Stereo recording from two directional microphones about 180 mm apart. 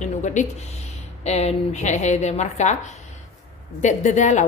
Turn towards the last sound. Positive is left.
turn(degrees=40)  # may be behind; listen again after turning